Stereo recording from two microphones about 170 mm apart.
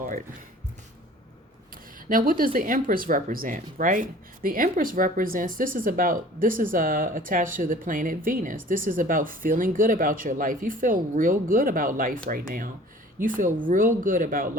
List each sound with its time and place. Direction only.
2.0 s speech: 55° right (ahead or behind)